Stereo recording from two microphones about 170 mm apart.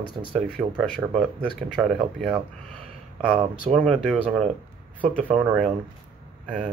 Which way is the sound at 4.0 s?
5° left (ahead or behind).